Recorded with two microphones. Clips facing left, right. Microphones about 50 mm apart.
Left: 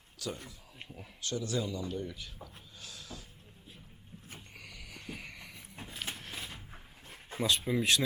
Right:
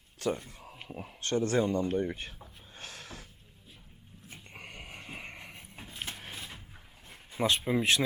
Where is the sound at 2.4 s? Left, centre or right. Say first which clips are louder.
Right 3 dB; right.